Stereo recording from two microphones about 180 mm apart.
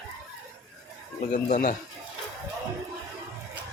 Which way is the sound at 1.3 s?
45° left (ahead or behind).